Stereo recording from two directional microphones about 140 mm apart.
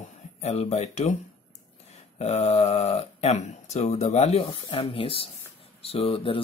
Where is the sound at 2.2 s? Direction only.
50° left (ahead or behind).